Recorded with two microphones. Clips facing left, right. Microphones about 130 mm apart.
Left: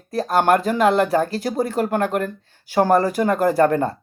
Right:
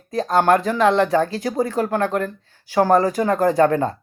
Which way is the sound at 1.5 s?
15° left (ahead or behind).